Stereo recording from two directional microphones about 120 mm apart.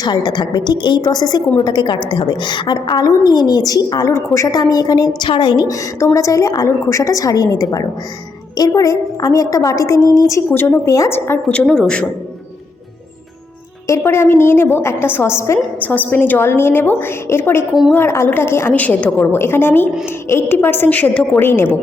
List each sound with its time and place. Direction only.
0.0 s a woman's voice: 35° left (ahead or behind)
11.4 s a woman's voice: 5° left (ahead or behind)
13.8 s a woman's voice: 25° left (ahead or behind)